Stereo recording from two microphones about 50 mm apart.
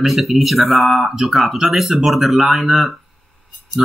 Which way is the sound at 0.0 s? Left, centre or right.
Centre.